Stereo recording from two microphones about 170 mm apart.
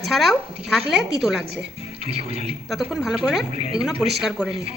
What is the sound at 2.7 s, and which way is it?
Speech, 5° right (ahead or behind).